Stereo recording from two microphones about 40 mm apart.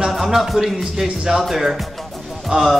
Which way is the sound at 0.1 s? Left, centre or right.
Centre.